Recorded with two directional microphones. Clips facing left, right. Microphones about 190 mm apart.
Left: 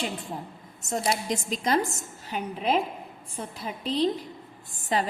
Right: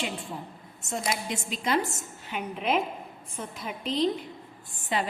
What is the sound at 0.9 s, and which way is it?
A woman's voice, 40° left (ahead or behind).